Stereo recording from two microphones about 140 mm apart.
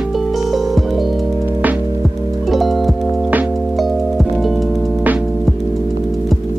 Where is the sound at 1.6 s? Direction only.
10° right (ahead or behind).